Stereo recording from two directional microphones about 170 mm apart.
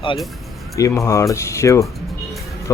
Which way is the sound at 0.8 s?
15° left (ahead or behind).